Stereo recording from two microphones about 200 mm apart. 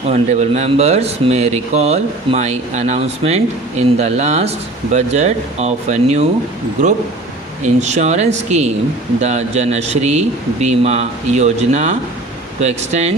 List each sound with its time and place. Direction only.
0.1 s speech: 35° right (ahead or behind)
7.6 s speech: 35° right (ahead or behind)